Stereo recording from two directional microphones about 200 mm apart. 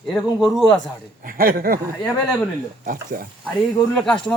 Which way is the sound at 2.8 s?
45° right (ahead or behind).